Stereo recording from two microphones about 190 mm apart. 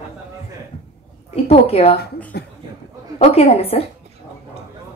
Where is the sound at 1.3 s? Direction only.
30° left (ahead or behind).